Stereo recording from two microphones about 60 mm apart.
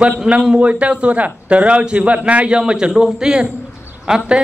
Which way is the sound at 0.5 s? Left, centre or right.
Right.